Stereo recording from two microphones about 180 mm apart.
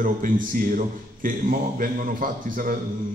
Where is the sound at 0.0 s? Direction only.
50° right (ahead or behind).